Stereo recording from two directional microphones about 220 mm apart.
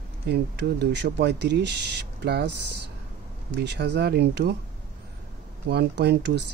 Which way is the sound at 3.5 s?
50° right (ahead or behind).